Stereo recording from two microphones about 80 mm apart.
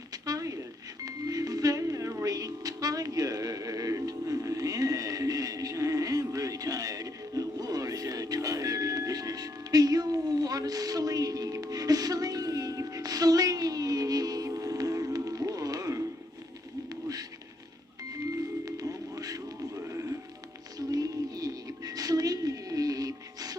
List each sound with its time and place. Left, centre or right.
0.1 s a sound: right
1.0 s music: right
16.9 s bird: right
18.6 s music: right
19.9 s music: right
20.7 s music: right